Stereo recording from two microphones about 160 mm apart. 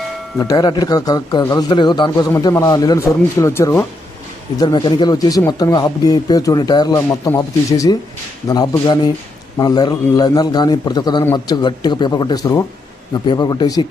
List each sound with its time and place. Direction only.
0.3 s a man's voice: 25° left (ahead or behind)
4.6 s a man's voice: 30° left (ahead or behind)